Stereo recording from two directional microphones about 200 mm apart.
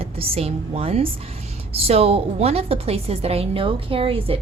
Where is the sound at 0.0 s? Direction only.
30° right (ahead or behind).